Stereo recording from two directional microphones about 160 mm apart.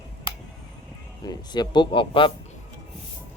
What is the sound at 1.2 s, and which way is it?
Speech, 25° left (ahead or behind).